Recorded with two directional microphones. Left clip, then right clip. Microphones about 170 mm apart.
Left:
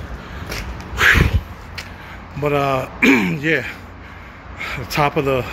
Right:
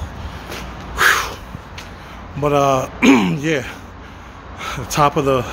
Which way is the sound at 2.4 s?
20° right (ahead or behind).